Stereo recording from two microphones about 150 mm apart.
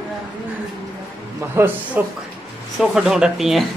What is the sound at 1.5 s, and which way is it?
Speech, 15° right (ahead or behind).